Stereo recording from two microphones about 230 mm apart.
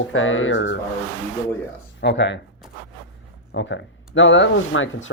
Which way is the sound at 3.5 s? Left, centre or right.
Left.